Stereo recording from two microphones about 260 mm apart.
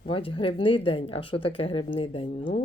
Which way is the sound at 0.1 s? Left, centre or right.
Centre.